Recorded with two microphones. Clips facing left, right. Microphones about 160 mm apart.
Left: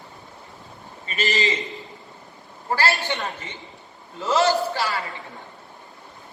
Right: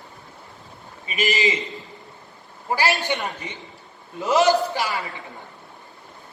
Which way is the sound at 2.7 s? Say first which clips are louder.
Right 1 dB; 15° right (ahead or behind).